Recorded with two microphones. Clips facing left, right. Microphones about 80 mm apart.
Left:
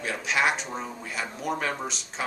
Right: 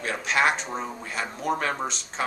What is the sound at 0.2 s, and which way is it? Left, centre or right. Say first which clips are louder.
Speech: right 2 dB; centre.